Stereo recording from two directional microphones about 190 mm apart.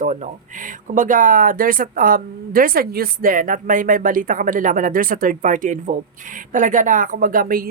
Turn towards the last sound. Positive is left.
turn(degrees=-50)  # may be behind; listen again after turning